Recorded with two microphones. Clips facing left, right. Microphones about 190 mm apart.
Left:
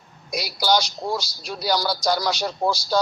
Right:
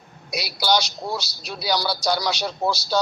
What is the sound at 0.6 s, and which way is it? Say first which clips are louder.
A man's voice: left 1 dB; 10° left (ahead or behind).